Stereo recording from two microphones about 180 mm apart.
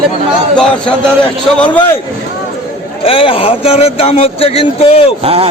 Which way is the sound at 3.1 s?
30° left (ahead or behind).